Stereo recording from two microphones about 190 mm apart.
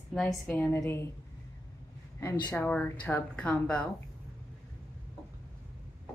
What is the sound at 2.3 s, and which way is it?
A woman's voice, 15° left (ahead or behind).